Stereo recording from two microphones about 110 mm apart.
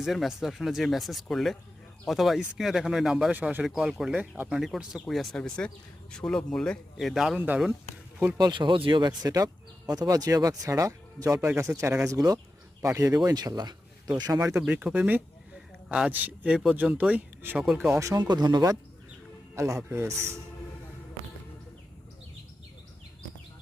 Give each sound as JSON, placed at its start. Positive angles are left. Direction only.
{"t": 0.0, "sound": "speech", "side_deg": 0}
{"t": 3.3, "sound": "speech", "side_deg": -15}
{"t": 3.6, "sound": "speech", "side_deg": -5}
{"t": 7.3, "sound": "speech", "side_deg": -15}
{"t": 8.4, "sound": "speech", "side_deg": -40}
{"t": 14.6, "sound": "speech", "side_deg": -5}
{"t": 17.6, "sound": "speech", "side_deg": -5}
{"t": 17.9, "sound": "speech", "side_deg": -30}
{"t": 18.2, "sound": "speech", "side_deg": -40}